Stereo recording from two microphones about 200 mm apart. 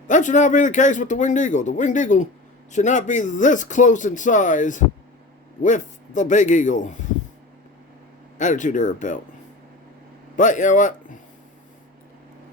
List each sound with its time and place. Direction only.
0.1 s speech: 40° left (ahead or behind)
8.4 s speech: 40° left (ahead or behind)
10.3 s speech: 40° left (ahead or behind)